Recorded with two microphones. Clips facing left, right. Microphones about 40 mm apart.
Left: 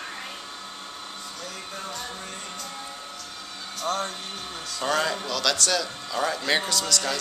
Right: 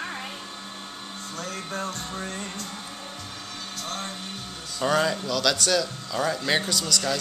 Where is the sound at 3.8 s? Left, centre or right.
Left.